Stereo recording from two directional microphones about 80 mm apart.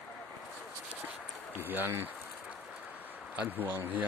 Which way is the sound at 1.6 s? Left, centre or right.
Right.